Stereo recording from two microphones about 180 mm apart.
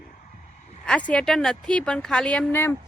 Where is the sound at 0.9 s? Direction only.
5° left (ahead or behind).